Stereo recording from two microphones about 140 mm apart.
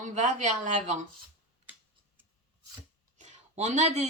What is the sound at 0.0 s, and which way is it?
Speech, 60° right (ahead or behind).